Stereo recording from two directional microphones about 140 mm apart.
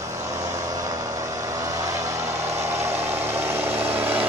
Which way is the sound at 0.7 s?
25° right (ahead or behind).